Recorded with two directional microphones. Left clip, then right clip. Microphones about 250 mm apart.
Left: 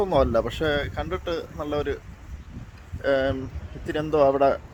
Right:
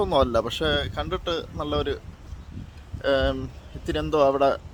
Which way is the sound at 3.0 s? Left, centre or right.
Centre.